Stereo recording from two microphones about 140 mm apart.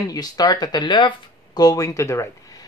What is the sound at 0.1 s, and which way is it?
Speech, 25° left (ahead or behind).